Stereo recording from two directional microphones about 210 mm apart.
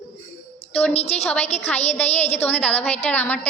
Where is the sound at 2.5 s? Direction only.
5° left (ahead or behind).